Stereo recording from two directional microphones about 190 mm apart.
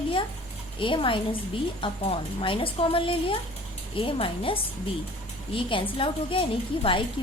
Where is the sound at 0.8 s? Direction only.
25° left (ahead or behind).